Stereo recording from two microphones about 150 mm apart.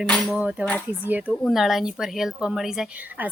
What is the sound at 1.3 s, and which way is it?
Speech, centre (ahead or behind).